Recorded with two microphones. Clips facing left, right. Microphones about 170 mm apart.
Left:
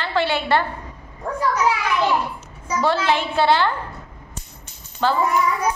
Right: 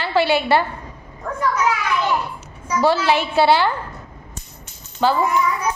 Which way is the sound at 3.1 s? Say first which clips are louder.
Right 2 dB; 10° right (ahead or behind).